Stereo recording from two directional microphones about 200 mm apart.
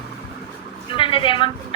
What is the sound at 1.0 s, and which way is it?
Speech, 25° left (ahead or behind).